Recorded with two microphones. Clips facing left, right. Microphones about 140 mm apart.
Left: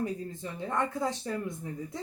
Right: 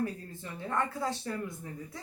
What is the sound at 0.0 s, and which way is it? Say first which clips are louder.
Speech: left 2 dB; 20° left (ahead or behind).